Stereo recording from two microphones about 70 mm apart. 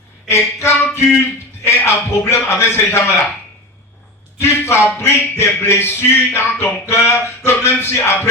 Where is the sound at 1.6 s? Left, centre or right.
Left.